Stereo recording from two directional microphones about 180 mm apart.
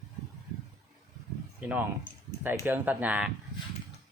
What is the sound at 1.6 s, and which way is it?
Speech, 5° right (ahead or behind).